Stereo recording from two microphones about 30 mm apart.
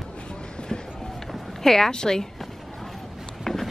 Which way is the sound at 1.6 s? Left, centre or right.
Centre.